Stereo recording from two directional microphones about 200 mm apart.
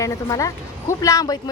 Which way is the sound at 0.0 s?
15° left (ahead or behind).